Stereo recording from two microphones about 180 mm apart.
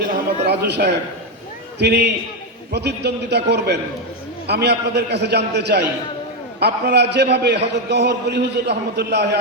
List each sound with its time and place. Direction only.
0.4 s a man's voice: 70° right (ahead or behind)